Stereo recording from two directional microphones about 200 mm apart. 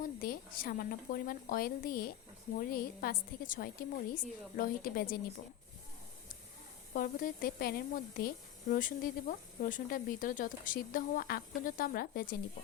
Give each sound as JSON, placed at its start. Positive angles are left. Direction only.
{"t": 0.0, "sound": "speech", "side_deg": 45}
{"t": 6.9, "sound": "speech", "side_deg": 45}